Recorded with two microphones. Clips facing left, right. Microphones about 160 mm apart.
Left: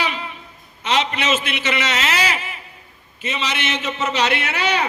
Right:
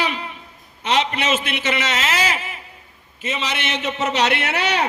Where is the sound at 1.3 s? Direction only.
50° right (ahead or behind).